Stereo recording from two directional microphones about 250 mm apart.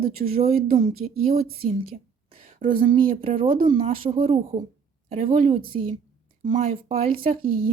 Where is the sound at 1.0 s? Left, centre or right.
Right.